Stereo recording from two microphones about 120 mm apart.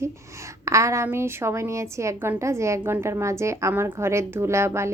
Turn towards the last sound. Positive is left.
turn(degrees=-20)  # may be behind; listen again after turning